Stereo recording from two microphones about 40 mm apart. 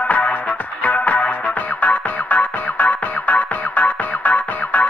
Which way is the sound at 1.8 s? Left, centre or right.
Left.